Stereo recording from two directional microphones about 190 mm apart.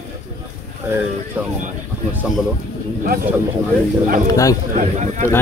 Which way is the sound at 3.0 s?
50° right (ahead or behind).